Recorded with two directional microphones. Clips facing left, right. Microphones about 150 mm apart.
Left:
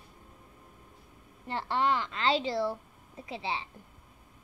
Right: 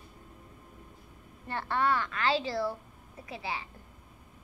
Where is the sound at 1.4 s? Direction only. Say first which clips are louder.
Even; 20° left (ahead or behind).